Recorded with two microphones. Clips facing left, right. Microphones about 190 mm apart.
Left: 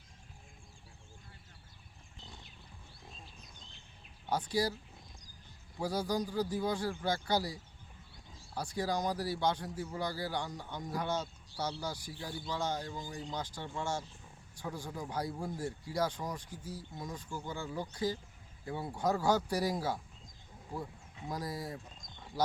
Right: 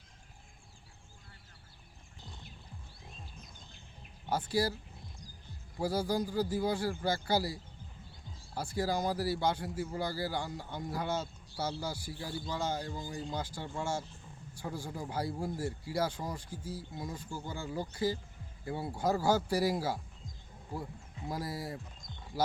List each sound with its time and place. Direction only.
4.3 s a man's voice: 5° right (ahead or behind)
5.8 s a man's voice: 5° right (ahead or behind)
8.5 s a man's voice: 5° right (ahead or behind)